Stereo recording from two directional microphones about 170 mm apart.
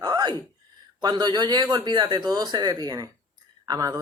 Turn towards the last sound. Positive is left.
turn(degrees=-20)  # may be behind; listen again after turning